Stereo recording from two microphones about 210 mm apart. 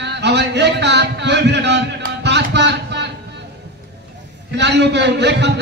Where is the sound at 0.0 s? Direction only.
55° right (ahead or behind).